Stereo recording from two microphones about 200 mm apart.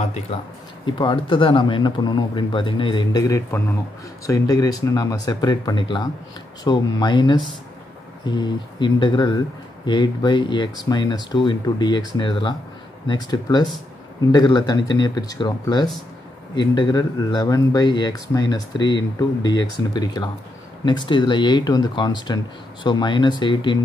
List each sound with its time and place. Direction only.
0.0 s speech: 35° left (ahead or behind)
0.8 s speech: 25° left (ahead or behind)